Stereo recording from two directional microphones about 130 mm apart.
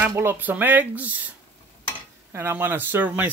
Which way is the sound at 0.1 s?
20° right (ahead or behind).